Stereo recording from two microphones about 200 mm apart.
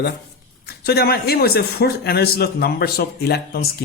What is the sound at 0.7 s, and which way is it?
A man's voice, 50° left (ahead or behind).